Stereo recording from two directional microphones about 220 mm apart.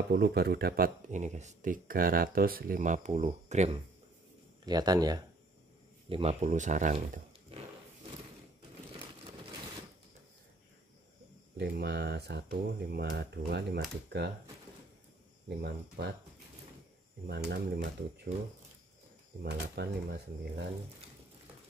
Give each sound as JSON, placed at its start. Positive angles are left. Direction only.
{"t": 0.1, "sound": "speech", "side_deg": -45}
{"t": 4.6, "sound": "speech", "side_deg": -20}
{"t": 11.5, "sound": "speech", "side_deg": -50}
{"t": 17.5, "sound": "speech", "side_deg": -50}
{"t": 19.4, "sound": "speech", "side_deg": -50}